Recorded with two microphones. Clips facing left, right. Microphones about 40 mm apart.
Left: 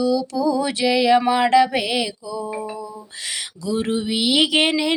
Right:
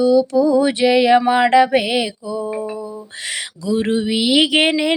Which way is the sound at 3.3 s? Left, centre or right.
Right.